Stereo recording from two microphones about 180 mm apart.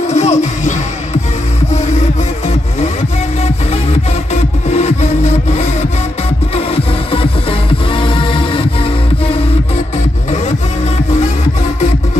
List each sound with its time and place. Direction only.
0.0 s music: 40° left (ahead or behind)
4.3 s music: 40° left (ahead or behind)